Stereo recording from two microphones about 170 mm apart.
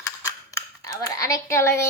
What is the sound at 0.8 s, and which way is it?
Speech, 20° left (ahead or behind).